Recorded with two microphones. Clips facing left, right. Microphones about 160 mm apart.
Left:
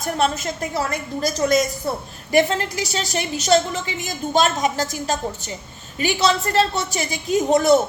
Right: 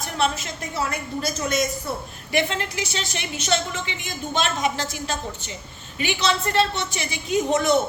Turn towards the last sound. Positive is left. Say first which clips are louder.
# left 4 dB
turn(degrees=40)  # may be behind; listen again after turning